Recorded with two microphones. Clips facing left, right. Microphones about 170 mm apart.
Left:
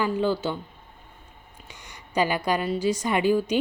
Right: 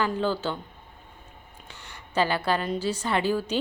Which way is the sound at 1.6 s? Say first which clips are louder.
Even; 10° left (ahead or behind).